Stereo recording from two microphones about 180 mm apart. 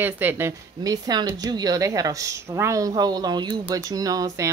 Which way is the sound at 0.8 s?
20° right (ahead or behind).